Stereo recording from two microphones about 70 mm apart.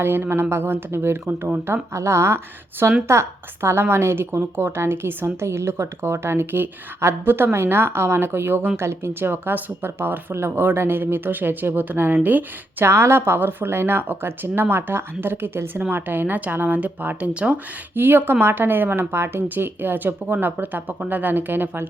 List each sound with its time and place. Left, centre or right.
0.0 s a woman's voice: right
12.8 s speech: right